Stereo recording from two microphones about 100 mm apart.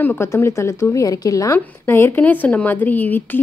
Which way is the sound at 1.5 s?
25° left (ahead or behind).